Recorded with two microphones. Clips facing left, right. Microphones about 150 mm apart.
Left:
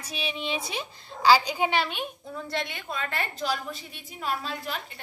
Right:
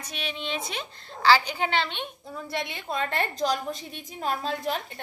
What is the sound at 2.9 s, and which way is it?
A woman's voice, 35° right (ahead or behind).